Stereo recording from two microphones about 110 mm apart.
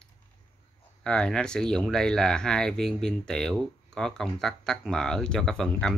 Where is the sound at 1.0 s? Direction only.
10° left (ahead or behind).